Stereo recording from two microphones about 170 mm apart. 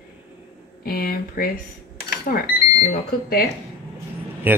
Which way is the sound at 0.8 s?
60° left (ahead or behind).